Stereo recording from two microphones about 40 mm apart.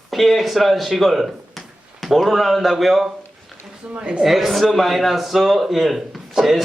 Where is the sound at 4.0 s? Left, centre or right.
Right.